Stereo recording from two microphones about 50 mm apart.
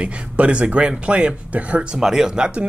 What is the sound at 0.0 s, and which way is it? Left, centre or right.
Speech, right.